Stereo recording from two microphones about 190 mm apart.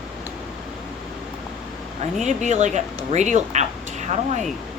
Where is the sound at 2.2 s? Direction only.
40° right (ahead or behind).